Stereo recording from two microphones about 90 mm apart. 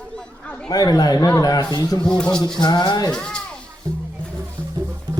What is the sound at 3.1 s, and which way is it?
Speech, 10° left (ahead or behind).